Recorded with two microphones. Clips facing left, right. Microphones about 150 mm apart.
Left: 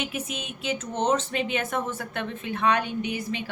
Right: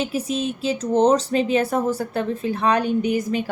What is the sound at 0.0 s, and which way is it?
A woman's voice, 35° right (ahead or behind).